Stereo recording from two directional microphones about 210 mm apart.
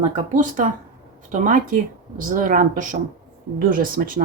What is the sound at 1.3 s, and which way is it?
Speech, 40° right (ahead or behind).